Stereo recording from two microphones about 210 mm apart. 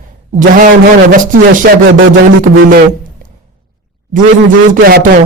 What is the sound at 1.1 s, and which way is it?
Speech, 40° right (ahead or behind).